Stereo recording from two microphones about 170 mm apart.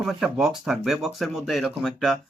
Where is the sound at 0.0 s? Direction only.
5° right (ahead or behind).